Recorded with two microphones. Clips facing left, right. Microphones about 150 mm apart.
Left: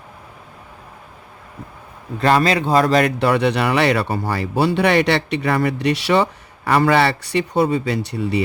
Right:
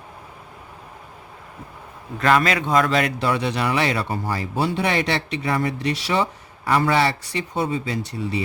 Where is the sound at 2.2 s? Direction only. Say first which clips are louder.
Left 3 dB; 30° left (ahead or behind).